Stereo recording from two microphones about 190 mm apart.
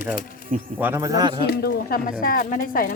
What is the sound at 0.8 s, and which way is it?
Speech, 15° right (ahead or behind).